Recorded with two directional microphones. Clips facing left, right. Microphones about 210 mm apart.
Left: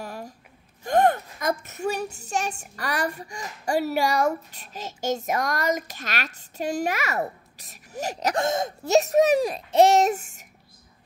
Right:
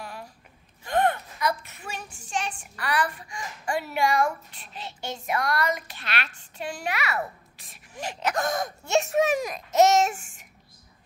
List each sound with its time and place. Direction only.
0.0 s gasp: 40° left (ahead or behind)
0.8 s a woman's voice: 45° left (ahead or behind)
8.4 s speech: 25° left (ahead or behind)
8.8 s a woman's voice: 40° left (ahead or behind)